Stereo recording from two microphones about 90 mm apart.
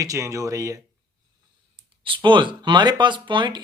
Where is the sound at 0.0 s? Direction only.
35° right (ahead or behind).